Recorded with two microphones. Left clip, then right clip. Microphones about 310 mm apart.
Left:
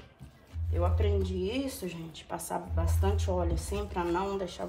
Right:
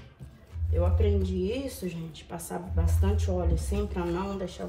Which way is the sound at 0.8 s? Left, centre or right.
Centre.